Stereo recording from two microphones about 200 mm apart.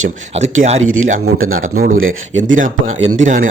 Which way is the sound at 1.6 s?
45° right (ahead or behind).